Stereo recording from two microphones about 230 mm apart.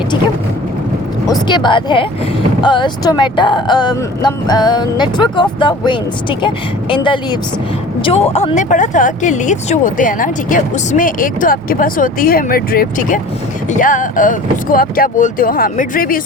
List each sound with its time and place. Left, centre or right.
1.3 s speech: centre; by 16.2 s left